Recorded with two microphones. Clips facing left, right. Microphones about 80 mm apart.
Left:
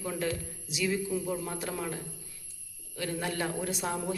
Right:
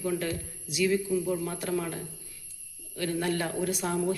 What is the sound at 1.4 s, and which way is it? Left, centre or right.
Speech, left.